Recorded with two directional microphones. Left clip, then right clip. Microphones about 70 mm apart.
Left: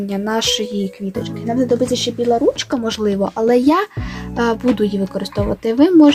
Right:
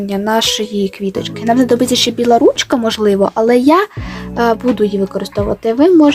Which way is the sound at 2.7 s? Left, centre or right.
Right.